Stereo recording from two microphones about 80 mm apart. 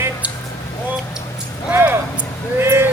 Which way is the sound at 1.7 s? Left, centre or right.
Right.